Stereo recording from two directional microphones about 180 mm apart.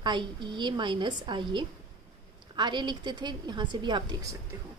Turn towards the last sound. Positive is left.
turn(degrees=-25)  # may be behind; listen again after turning